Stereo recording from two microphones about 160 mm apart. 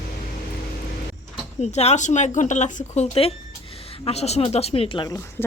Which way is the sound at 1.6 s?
45° left (ahead or behind).